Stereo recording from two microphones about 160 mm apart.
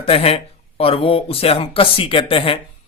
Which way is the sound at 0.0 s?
35° left (ahead or behind).